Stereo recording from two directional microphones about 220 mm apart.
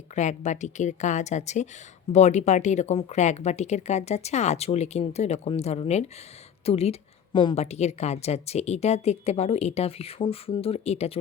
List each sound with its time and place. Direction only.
0.2 s a woman's voice: 35° left (ahead or behind)